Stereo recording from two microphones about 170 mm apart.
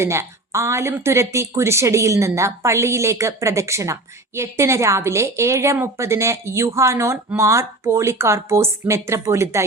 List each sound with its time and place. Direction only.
0.0 s a woman's voice: 15° right (ahead or behind)